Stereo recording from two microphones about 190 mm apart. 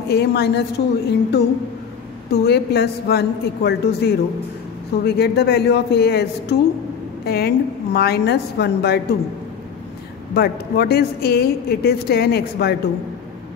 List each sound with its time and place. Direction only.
0.1 s a woman's voice: 60° left (ahead or behind)
7.2 s a woman's voice: 55° left (ahead or behind)
10.3 s a woman's voice: 55° left (ahead or behind)